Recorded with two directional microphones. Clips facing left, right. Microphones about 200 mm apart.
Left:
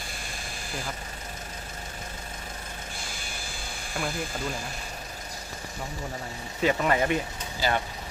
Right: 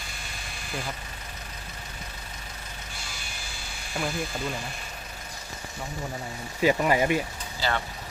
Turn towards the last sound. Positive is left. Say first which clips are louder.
# left 2 dB
turn(degrees=15)  # may be behind; listen again after turning